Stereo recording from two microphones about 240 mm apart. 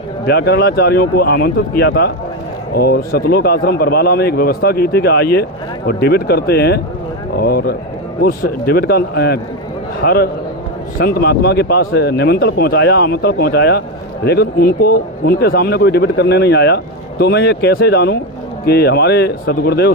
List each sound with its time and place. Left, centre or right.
0.3 s speech: left